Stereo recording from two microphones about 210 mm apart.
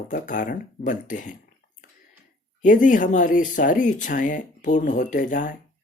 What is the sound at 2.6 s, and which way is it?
Speech, 40° left (ahead or behind).